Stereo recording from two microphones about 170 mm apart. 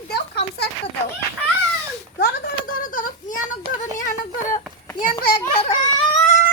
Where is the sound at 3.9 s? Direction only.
50° left (ahead or behind).